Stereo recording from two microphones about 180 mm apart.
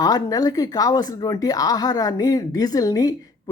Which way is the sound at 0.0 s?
20° left (ahead or behind).